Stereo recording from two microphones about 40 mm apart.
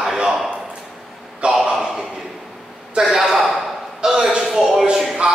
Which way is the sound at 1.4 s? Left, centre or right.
Right.